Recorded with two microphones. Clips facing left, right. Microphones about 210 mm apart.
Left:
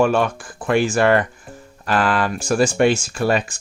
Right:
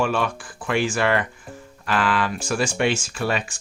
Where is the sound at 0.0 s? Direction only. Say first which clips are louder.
Left 6 dB; 45° left (ahead or behind).